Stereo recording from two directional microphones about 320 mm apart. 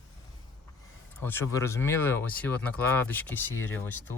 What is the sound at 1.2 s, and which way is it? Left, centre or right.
Speech, centre.